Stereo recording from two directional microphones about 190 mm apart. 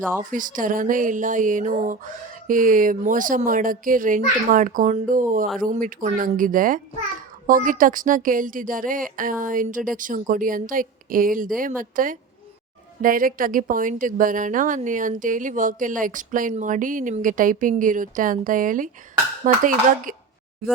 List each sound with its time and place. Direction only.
0.2 s a woman's voice: 45° right (ahead or behind)